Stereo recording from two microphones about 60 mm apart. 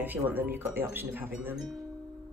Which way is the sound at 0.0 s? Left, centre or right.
Right.